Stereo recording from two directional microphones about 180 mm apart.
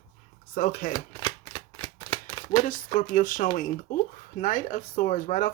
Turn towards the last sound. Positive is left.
turn(degrees=45)  # may be behind; listen again after turning